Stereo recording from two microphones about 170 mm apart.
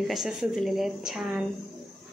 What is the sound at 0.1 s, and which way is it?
A woman's voice, centre (ahead or behind).